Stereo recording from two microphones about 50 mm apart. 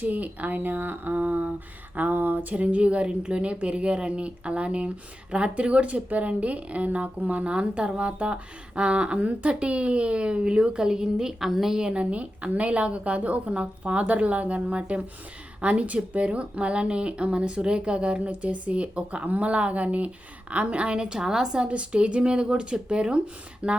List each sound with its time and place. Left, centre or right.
0.0 s a woman's voice: right